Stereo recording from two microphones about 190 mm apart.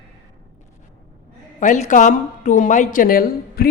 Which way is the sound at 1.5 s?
40° left (ahead or behind).